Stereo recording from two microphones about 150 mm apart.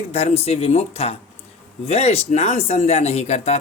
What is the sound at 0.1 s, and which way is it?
Speech, 45° left (ahead or behind).